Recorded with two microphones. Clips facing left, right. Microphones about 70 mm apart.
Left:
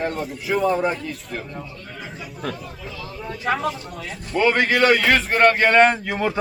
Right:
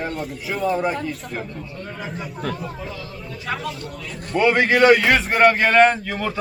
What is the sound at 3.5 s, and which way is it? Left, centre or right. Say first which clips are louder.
Speech: left 4 dB; left.